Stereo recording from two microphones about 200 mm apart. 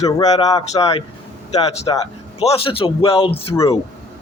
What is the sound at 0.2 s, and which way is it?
Speech, 20° left (ahead or behind).